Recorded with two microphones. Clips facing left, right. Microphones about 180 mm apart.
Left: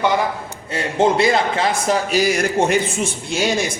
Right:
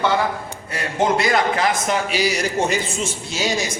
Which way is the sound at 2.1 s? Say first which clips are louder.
Left 4 dB; 50° left (ahead or behind).